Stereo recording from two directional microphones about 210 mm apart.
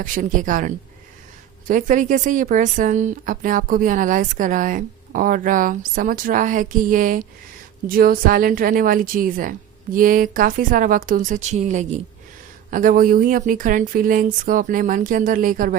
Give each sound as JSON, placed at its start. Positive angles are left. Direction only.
{"t": 0.0, "sound": "speech", "side_deg": -40}